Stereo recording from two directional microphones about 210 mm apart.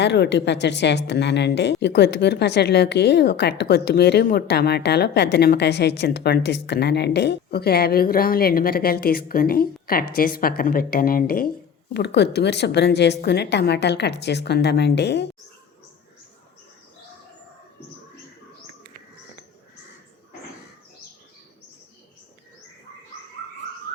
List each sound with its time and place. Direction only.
0.0 s a woman's voice: 55° left (ahead or behind)